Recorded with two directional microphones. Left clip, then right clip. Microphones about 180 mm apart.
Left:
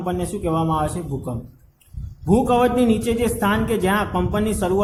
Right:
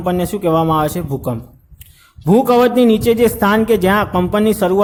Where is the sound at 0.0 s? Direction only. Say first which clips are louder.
Right 7 dB; 45° right (ahead or behind).